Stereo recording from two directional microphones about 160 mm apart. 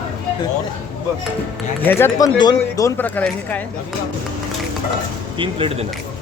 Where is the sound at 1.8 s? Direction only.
15° left (ahead or behind).